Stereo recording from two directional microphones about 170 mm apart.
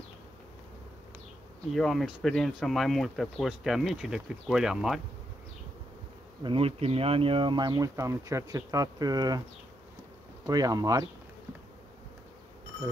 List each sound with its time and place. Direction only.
1.7 s speech: centre (ahead or behind)
6.4 s speech: 35° right (ahead or behind)
10.4 s speech: 20° right (ahead or behind)